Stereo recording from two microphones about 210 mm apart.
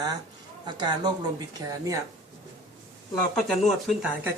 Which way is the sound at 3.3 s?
Centre (ahead or behind).